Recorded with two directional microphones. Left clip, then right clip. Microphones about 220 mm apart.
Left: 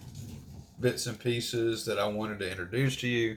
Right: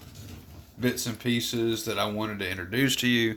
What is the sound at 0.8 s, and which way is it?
Speech, 55° right (ahead or behind).